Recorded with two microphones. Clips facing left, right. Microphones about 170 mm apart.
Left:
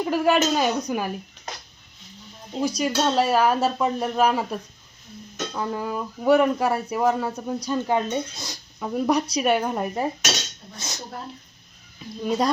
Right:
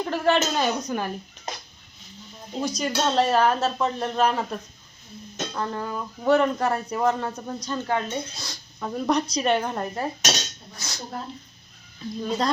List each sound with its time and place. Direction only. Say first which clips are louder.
0.0 s speech: left 2 dB; 10° left (ahead or behind)
2.6 s speech: left 3 dB; 5° left (ahead or behind)
12.2 s speech: left 3 dB; 10° left (ahead or behind)